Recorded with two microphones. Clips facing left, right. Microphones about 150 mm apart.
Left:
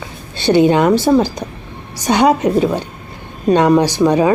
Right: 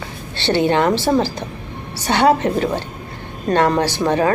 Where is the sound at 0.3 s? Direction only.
15° left (ahead or behind).